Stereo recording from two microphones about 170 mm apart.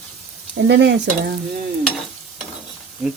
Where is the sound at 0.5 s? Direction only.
90° right.